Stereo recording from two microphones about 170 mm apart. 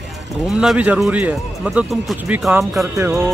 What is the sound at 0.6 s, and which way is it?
Speech, 5° right (ahead or behind).